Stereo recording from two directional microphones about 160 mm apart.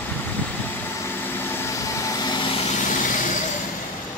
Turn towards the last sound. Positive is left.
turn(degrees=55)  # may be behind; listen again after turning